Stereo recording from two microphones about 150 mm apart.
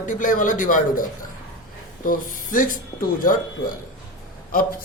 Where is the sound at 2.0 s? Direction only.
65° left (ahead or behind).